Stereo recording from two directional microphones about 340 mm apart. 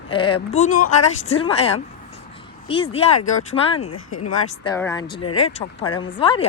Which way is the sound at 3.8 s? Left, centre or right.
Left.